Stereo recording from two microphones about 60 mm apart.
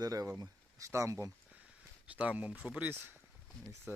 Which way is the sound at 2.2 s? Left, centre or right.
Right.